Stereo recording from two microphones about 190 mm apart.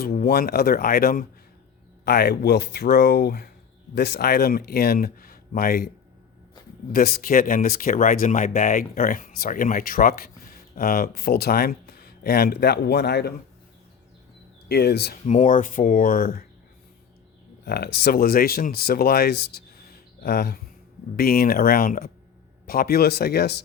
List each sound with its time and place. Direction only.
0.0 s speech: 50° left (ahead or behind)
6.9 s speech: 50° left (ahead or behind)
14.7 s speech: 60° left (ahead or behind)
15.3 s speech: 45° left (ahead or behind)
17.7 s speech: 55° left (ahead or behind)